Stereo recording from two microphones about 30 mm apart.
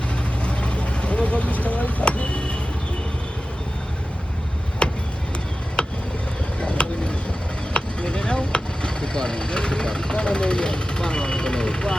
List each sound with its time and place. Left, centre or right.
0.4 s vehicle: left
4.8 s a sound: left
5.8 s vehicle: left